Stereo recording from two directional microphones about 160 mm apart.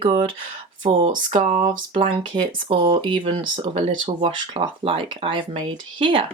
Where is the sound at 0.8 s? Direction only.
30° right (ahead or behind).